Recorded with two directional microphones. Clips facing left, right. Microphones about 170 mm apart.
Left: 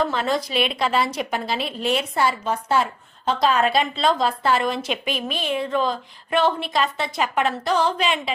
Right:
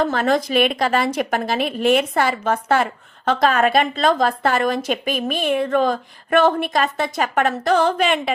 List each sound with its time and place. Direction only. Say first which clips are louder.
0.0 s a woman's voice: right 4 dB; 50° right (ahead or behind)